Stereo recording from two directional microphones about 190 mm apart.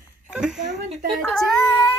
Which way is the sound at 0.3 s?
5° right (ahead or behind).